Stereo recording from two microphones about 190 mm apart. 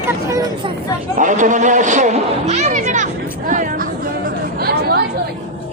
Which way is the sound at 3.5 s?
45° right (ahead or behind).